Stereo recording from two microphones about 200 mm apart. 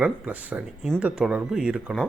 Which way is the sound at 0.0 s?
5° right (ahead or behind).